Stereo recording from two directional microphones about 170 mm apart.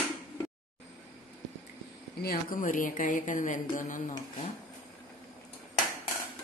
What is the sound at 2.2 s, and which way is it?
Speech, 60° left (ahead or behind).